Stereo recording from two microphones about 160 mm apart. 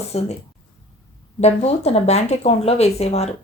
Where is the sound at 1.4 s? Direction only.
40° left (ahead or behind).